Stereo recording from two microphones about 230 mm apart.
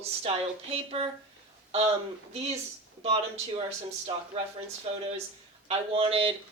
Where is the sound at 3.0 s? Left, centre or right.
Right.